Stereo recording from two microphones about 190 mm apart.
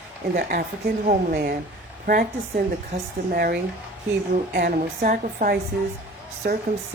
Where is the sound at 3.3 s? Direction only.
50° right (ahead or behind).